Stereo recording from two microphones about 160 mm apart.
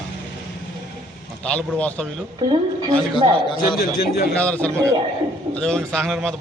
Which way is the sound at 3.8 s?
70° left (ahead or behind).